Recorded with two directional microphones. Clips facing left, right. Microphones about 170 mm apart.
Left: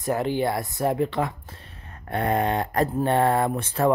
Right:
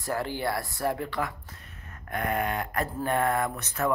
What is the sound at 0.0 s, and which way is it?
Speech, 20° left (ahead or behind).